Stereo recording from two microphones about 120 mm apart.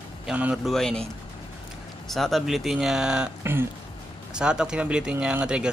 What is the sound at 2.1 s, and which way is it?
Speech, centre (ahead or behind).